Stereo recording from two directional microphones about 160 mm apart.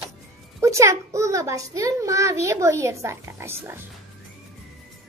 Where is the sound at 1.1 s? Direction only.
20° right (ahead or behind).